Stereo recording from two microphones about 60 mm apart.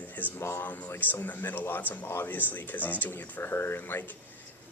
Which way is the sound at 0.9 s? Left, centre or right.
Left.